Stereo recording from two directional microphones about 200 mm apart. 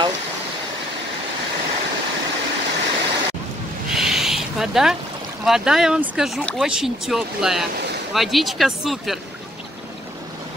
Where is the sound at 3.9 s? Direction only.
Centre (ahead or behind).